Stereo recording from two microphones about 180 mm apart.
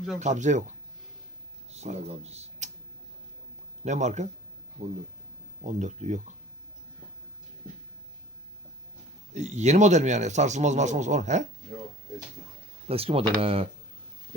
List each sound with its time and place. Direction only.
0.2 s speech: 40° right (ahead or behind)
1.7 s speech: 35° right (ahead or behind)
3.8 s speech: 40° right (ahead or behind)
5.6 s speech: 40° right (ahead or behind)
9.3 s speech: 40° right (ahead or behind)
12.9 s speech: 30° right (ahead or behind)